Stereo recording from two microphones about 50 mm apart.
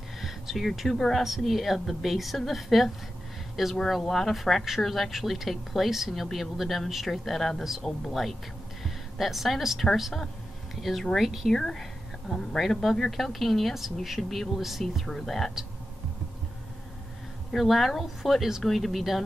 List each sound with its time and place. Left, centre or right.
0.2 s a woman's voice: centre
11.5 s a woman's voice: centre
17.5 s a woman's voice: centre